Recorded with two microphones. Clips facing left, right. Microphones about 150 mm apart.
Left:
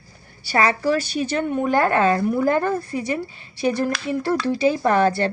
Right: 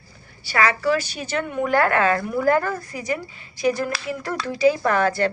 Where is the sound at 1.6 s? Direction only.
25° left (ahead or behind).